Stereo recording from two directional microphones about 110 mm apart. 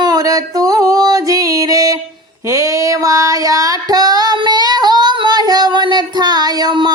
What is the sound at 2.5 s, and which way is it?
Female singing, 30° right (ahead or behind).